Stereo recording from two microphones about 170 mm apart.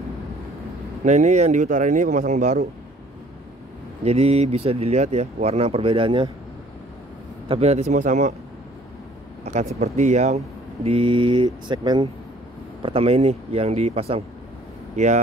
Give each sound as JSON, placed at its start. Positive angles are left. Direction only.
{"t": 1.0, "sound": "speech", "side_deg": -45}
{"t": 4.0, "sound": "speech", "side_deg": -40}
{"t": 7.4, "sound": "speech", "side_deg": -35}
{"t": 9.4, "sound": "speech", "side_deg": -40}